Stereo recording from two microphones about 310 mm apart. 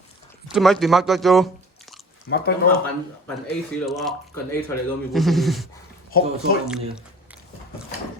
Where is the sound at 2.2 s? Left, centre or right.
Left.